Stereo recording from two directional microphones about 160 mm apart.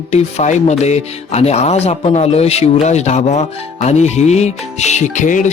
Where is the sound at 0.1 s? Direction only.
45° left (ahead or behind).